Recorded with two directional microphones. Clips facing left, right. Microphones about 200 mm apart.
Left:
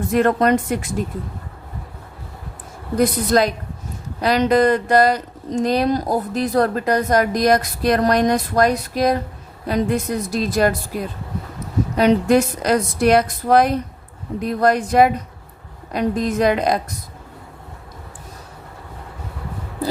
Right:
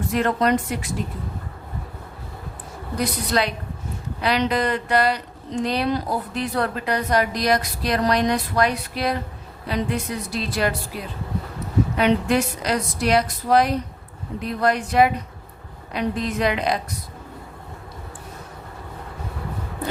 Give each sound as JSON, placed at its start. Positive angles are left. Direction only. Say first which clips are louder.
{"t": 0.1, "sound": "speech", "louder": "left 4 dB", "side_deg": 50}
{"t": 3.0, "sound": "speech", "louder": "left 7 dB", "side_deg": 45}